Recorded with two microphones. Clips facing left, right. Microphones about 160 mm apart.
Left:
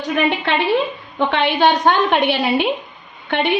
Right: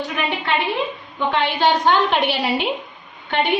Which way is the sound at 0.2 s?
60° left (ahead or behind).